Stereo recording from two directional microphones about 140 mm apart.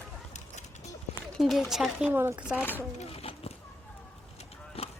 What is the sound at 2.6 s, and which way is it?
Speech, 15° left (ahead or behind).